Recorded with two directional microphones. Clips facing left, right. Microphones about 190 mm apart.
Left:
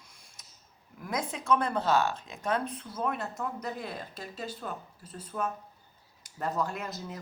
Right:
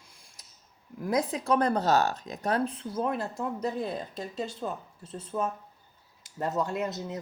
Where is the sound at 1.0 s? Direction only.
35° right (ahead or behind).